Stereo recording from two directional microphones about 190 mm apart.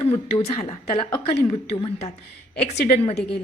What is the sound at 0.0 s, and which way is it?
Speech, 30° left (ahead or behind).